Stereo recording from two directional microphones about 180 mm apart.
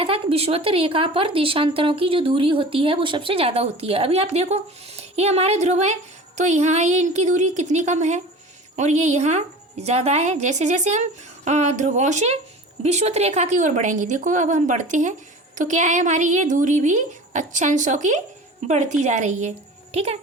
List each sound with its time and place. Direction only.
0.0 s speech: 30° right (ahead or behind)